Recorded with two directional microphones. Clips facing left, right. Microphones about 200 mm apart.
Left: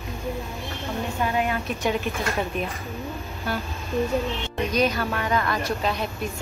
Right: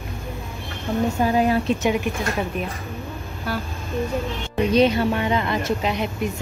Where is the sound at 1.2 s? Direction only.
35° right (ahead or behind).